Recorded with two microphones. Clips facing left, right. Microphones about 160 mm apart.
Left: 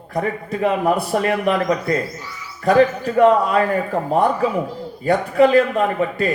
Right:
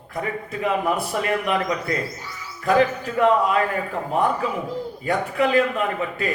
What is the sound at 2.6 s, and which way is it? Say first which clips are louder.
Speech: left 4 dB; 40° left (ahead or behind).